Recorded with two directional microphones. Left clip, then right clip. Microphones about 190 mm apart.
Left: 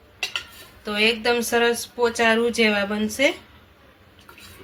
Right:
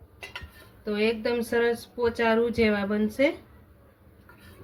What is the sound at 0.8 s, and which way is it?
Speech, 50° right (ahead or behind).